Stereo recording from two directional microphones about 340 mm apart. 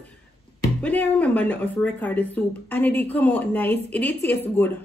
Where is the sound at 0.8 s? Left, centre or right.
Centre.